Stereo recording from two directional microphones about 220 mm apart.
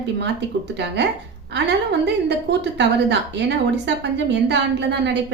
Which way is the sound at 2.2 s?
50° right (ahead or behind).